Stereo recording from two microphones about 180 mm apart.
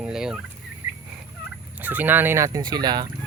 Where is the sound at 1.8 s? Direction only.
10° right (ahead or behind).